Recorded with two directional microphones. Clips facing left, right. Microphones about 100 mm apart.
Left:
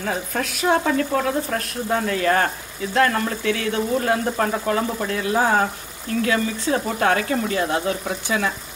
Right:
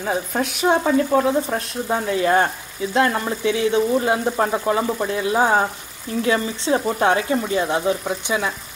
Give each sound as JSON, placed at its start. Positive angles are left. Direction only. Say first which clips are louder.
{"t": 0.0, "sound": "speech", "louder": "right 3 dB", "side_deg": -15}